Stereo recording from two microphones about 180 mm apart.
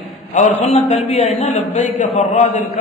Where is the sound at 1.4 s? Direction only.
35° left (ahead or behind).